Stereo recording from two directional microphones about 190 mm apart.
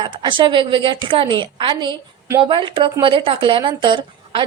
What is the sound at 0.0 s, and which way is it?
A woman's voice, 25° right (ahead or behind).